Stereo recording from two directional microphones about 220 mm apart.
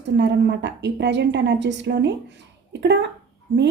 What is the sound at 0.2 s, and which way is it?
Speech, 50° right (ahead or behind).